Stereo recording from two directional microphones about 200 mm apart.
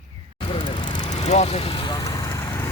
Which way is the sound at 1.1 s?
35° left (ahead or behind).